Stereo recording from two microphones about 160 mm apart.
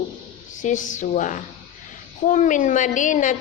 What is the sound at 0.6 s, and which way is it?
A woman's voice, 55° left (ahead or behind).